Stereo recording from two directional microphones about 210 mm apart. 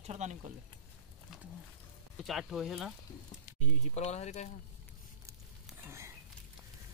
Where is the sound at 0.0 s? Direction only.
35° right (ahead or behind).